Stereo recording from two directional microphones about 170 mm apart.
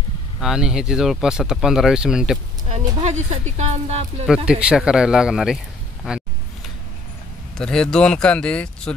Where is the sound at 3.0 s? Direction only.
45° right (ahead or behind).